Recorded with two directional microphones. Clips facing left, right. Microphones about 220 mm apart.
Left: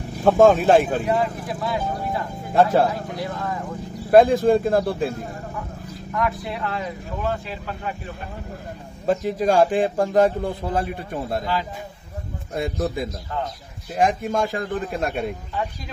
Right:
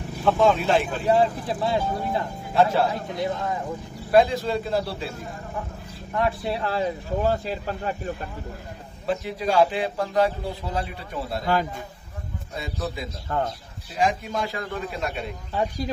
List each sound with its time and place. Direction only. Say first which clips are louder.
0.2 s speech: left 6 dB; 45° left (ahead or behind)
1.0 s speech: right 2 dB; 30° right (ahead or behind)
2.5 s speech: left 3 dB; 45° left (ahead or behind)
2.9 s speech: right 1 dB; 20° right (ahead or behind)
4.1 s speech: left 6 dB; 50° left (ahead or behind)
6.1 s speech: right 1 dB; 30° right (ahead or behind)
9.0 s speech: left 6 dB; 45° left (ahead or behind)
13.9 s speech: left 4 dB; 50° left (ahead or behind)